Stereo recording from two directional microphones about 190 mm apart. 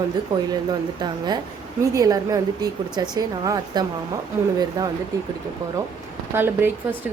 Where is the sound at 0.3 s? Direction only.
20° right (ahead or behind).